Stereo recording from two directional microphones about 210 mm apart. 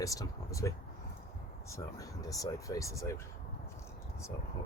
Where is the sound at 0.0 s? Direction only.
15° left (ahead or behind).